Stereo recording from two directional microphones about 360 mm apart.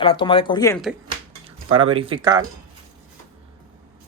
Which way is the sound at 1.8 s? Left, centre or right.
Centre.